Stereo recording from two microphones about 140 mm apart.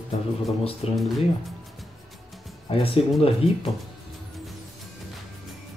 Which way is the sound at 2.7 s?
40° left (ahead or behind).